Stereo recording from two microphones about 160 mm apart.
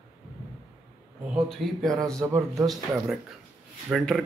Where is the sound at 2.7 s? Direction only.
Centre (ahead or behind).